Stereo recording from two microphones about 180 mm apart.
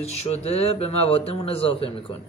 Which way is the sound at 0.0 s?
35° left (ahead or behind).